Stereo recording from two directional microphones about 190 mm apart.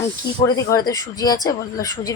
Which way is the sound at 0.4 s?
20° left (ahead or behind).